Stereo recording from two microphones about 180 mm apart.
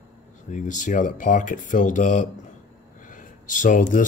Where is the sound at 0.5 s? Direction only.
45° left (ahead or behind).